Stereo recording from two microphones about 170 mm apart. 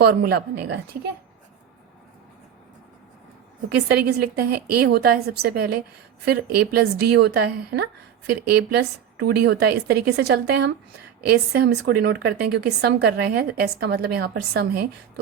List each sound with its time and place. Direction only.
0.0 s speech: 65° right (ahead or behind)
3.8 s speech: 75° right (ahead or behind)